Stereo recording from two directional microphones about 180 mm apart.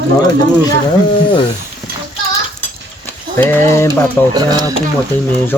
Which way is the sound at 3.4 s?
10° left (ahead or behind).